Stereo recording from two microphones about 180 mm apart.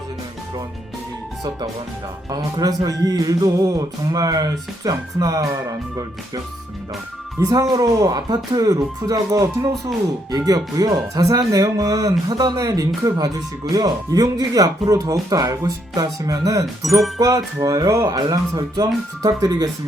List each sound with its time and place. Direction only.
2.3 s speech: 20° right (ahead or behind)